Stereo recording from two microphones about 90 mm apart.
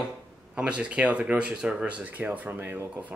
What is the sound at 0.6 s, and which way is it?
Speech, 10° right (ahead or behind).